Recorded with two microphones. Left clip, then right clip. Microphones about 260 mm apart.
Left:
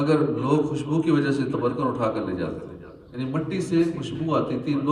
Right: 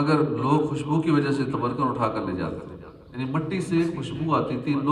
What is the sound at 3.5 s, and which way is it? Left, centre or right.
A man's voice, centre.